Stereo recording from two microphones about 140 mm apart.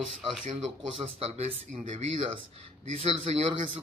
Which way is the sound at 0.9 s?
50° right (ahead or behind).